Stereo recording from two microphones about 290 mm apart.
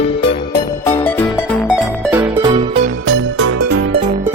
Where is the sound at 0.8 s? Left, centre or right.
Centre.